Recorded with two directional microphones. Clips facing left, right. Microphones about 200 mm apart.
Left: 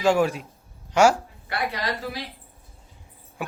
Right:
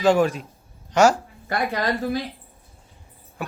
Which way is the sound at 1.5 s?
45° right (ahead or behind).